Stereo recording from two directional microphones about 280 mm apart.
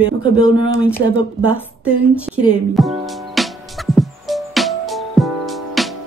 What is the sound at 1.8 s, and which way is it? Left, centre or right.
Music, centre.